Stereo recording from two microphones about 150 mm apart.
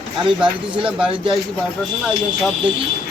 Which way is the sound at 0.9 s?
5° right (ahead or behind).